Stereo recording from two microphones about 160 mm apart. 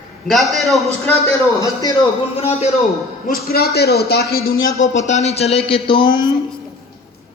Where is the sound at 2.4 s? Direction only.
40° left (ahead or behind).